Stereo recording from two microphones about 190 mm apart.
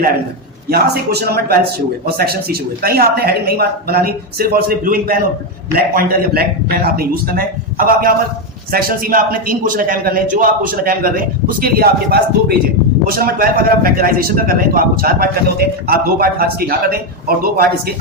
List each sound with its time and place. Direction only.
0.7 s a man's voice: 55° right (ahead or behind)